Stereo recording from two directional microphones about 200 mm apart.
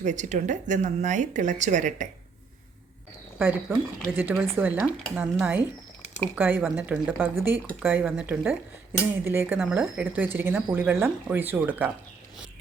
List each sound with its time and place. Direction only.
0.0 s a woman's voice: 35° right (ahead or behind)
3.7 s speech: 10° right (ahead or behind)